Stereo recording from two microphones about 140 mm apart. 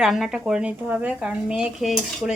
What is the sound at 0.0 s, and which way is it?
A woman's voice, centre (ahead or behind).